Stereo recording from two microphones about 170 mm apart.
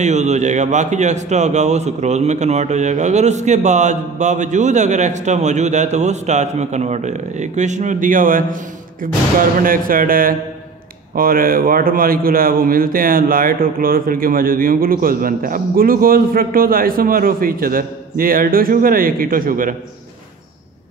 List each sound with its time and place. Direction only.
0.0 s a man's voice: 45° right (ahead or behind)
9.6 s a man's voice: 55° right (ahead or behind)